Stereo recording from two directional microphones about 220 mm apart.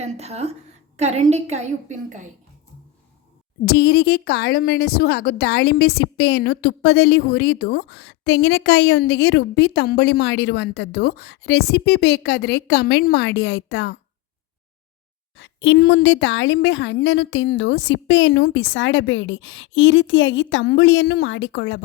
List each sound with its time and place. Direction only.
0.0 s a woman's voice: 30° right (ahead or behind)
3.7 s a woman's voice: 45° left (ahead or behind)
15.4 s a woman's voice: 50° left (ahead or behind)